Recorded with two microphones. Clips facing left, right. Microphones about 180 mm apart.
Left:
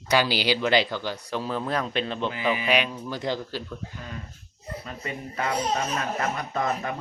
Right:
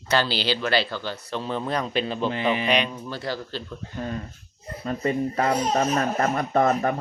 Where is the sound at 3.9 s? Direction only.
40° right (ahead or behind).